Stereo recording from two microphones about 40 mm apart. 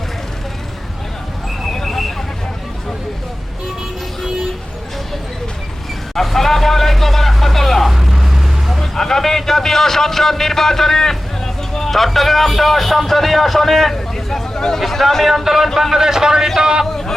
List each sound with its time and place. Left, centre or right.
1.6 s vehicle: centre
6.1 s vehicle: centre
7.9 s vehicle: centre
8.8 s a sound: centre
14.8 s a man's voice: centre
16.8 s a sound: centre